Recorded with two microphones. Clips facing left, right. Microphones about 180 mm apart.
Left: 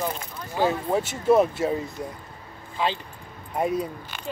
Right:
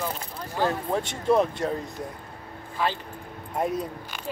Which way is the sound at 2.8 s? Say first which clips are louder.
Left 1 dB; 20° left (ahead or behind).